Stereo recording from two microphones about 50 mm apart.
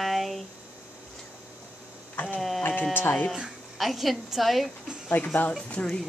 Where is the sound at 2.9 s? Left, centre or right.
Left.